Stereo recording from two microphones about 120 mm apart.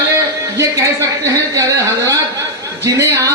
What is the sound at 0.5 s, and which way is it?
A man's voice, 25° right (ahead or behind).